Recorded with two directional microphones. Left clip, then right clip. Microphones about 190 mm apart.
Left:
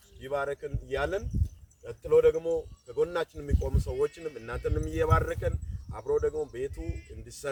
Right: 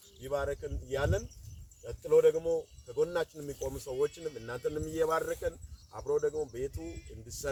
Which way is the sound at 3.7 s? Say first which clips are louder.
Left 2 dB; 25° left (ahead or behind).